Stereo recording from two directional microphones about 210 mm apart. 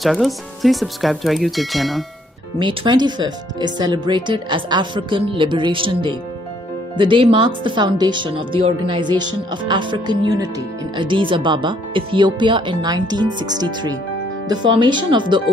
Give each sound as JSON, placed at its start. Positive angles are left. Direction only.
{"t": 0.0, "sound": "speech", "side_deg": 0}
{"t": 2.6, "sound": "speech", "side_deg": -20}